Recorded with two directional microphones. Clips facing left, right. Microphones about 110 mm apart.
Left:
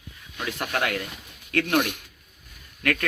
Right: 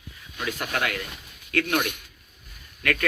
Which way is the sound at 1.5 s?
30° left (ahead or behind).